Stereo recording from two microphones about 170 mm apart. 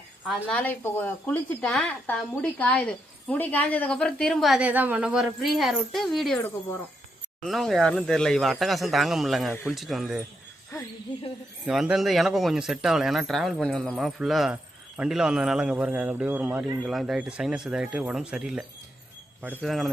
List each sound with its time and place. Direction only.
0.4 s speech: 10° left (ahead or behind)
7.4 s speech: centre (ahead or behind)
11.6 s speech: 5° right (ahead or behind)
19.6 s speech: centre (ahead or behind)